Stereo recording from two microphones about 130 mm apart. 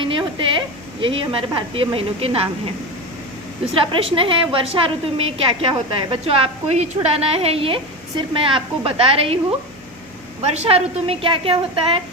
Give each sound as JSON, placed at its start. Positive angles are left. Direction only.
{"t": 0.0, "sound": "a sound", "side_deg": -40}
{"t": 1.0, "sound": "a woman's voice", "side_deg": -40}
{"t": 3.9, "sound": "a woman's voice", "side_deg": -40}
{"t": 10.4, "sound": "a woman's voice", "side_deg": -55}